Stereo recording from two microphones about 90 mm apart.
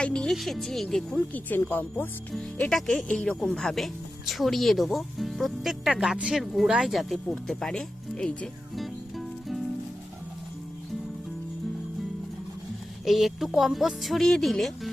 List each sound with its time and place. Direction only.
0.0 s speech: 10° left (ahead or behind)
1.3 s speech: 20° left (ahead or behind)
2.6 s speech: 5° left (ahead or behind)
8.7 s music: centre (ahead or behind)
13.1 s speech: centre (ahead or behind)